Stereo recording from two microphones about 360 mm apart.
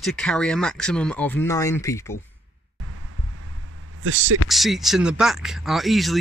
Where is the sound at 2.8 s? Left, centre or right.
Right.